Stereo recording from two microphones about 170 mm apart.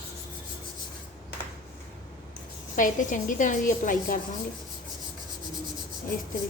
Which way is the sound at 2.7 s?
50° left (ahead or behind).